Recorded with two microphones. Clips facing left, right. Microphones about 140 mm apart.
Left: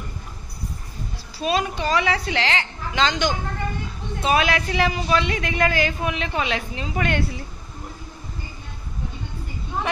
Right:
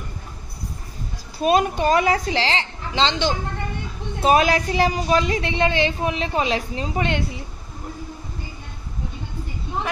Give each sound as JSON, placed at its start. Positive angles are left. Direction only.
{"t": 1.4, "sound": "a woman's voice", "side_deg": -50}
{"t": 2.3, "sound": "a woman's voice", "side_deg": -30}
{"t": 4.2, "sound": "a woman's voice", "side_deg": -40}
{"t": 7.1, "sound": "a woman's voice", "side_deg": -20}